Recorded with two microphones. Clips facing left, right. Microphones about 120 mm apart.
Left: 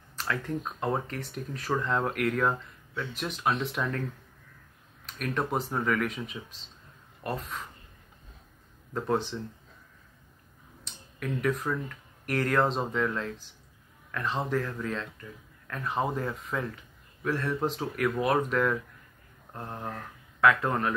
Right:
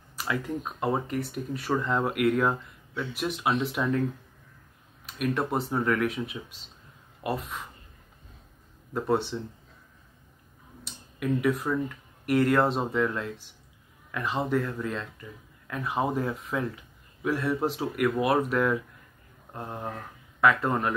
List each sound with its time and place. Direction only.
0.1 s speech: 10° right (ahead or behind)
5.0 s speech: 5° right (ahead or behind)
8.9 s speech: 5° right (ahead or behind)
10.8 s speech: 5° right (ahead or behind)